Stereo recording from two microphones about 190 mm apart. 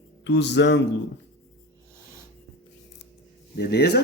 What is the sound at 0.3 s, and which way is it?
Speech, 70° left (ahead or behind).